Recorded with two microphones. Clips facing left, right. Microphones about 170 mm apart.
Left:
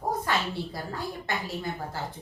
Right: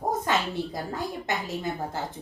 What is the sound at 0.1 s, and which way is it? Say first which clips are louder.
A woman's voice: right 1 dB; 20° right (ahead or behind).